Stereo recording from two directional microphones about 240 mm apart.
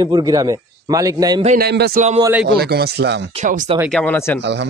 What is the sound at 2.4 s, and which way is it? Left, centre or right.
Speech, right.